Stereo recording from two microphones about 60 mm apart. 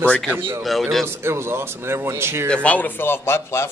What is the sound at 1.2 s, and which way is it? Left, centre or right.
Speech, right.